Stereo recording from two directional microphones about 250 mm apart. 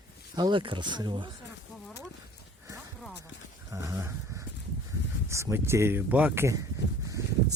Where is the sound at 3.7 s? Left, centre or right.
Centre.